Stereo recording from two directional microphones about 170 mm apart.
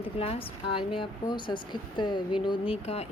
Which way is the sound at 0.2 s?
35° left (ahead or behind).